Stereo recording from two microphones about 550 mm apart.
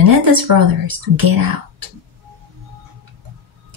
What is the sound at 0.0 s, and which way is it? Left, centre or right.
Speech, right.